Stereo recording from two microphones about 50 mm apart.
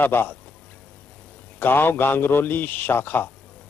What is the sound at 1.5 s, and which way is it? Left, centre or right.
A man's voice, left.